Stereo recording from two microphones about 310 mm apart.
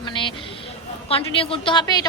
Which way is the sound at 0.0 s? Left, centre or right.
Centre.